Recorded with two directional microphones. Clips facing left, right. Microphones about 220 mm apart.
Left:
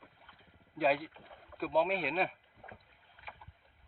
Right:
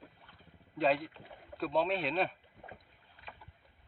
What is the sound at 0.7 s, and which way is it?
Speech, 5° left (ahead or behind).